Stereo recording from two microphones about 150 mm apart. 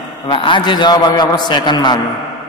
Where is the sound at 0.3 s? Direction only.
35° left (ahead or behind).